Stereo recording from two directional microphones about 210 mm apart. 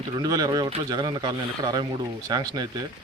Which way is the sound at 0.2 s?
20° right (ahead or behind).